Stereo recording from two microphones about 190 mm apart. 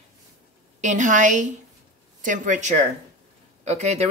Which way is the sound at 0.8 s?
40° right (ahead or behind).